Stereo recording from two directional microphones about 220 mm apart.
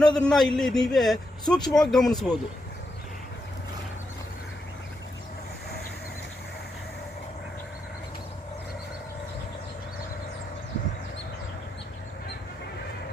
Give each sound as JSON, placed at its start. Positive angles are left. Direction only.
{"t": 0.0, "sound": "a man's voice", "side_deg": 5}
{"t": 1.5, "sound": "speech", "side_deg": 20}
{"t": 1.8, "sound": "a man's voice", "side_deg": 0}